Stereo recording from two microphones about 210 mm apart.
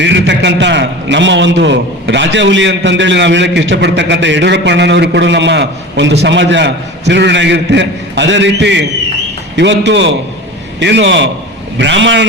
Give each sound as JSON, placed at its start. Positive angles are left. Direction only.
{"t": 0.0, "sound": "a man's voice", "side_deg": -55}